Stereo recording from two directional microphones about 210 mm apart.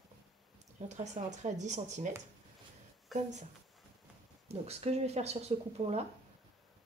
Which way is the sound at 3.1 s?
35° right (ahead or behind).